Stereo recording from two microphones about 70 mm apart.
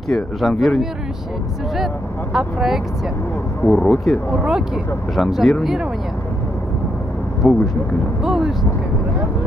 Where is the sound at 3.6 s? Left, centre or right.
Left.